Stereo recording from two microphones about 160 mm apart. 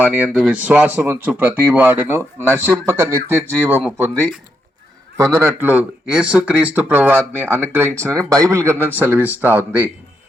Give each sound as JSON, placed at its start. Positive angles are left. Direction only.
{"t": 0.0, "sound": "speech", "side_deg": -10}
{"t": 5.1, "sound": "a man's voice", "side_deg": -20}